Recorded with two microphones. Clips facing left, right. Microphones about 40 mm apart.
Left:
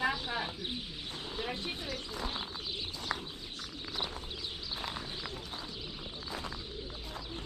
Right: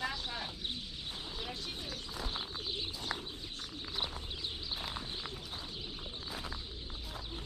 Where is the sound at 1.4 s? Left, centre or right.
Left.